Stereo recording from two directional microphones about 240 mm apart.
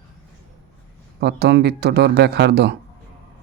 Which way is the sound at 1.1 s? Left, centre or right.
Right.